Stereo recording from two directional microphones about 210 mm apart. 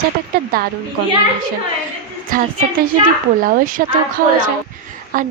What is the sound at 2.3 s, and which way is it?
A woman's voice, 40° right (ahead or behind).